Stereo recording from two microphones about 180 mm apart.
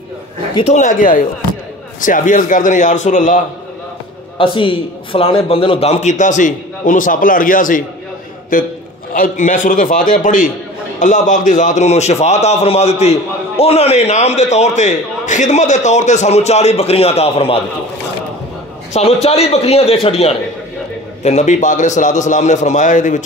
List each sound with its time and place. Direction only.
0.6 s a man's voice: 40° left (ahead or behind)
4.4 s a man's voice: 30° left (ahead or behind); by 7.8 s 45° left (ahead or behind)
9.1 s a man's voice: 50° left (ahead or behind)
18.9 s a man's voice: 35° left (ahead or behind)